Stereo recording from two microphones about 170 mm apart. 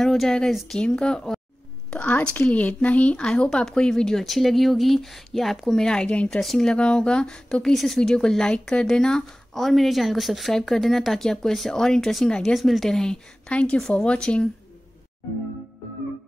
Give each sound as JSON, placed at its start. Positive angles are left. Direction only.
{"t": 0.0, "sound": "speech", "side_deg": 0}